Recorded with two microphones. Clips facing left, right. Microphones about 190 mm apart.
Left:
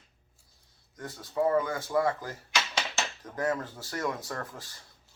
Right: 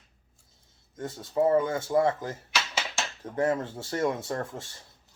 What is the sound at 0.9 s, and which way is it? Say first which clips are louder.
Speech: right 4 dB; 25° right (ahead or behind).